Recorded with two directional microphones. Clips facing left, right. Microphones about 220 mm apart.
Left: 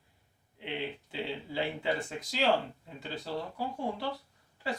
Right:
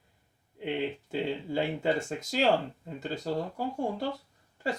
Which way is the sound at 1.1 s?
45° right (ahead or behind).